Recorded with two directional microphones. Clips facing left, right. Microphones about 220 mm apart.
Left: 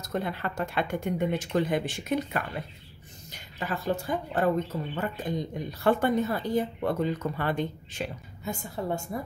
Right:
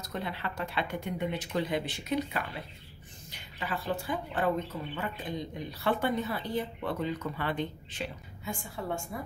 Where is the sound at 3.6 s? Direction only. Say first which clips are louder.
Left 4 dB; 45° left (ahead or behind).